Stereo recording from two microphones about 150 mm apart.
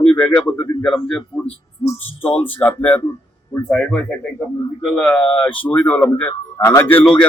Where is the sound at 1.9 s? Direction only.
40° left (ahead or behind).